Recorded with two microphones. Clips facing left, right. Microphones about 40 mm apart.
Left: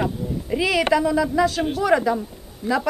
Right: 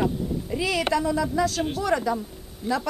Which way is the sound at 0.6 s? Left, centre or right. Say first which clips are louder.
Left 5 dB; left.